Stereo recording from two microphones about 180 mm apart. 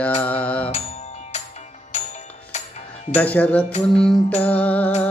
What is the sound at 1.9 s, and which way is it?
Music, 40° left (ahead or behind).